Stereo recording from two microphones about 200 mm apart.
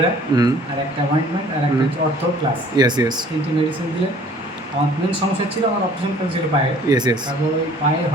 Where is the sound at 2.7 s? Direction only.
20° right (ahead or behind).